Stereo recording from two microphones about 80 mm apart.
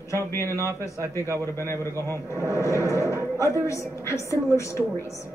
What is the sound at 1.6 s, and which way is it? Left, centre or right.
Speech, left.